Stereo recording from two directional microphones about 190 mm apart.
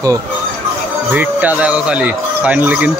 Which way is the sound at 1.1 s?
5° right (ahead or behind).